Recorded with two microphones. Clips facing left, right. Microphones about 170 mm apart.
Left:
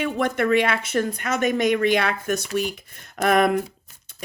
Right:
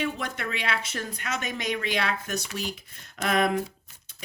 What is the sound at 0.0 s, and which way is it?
A woman's voice, 55° left (ahead or behind).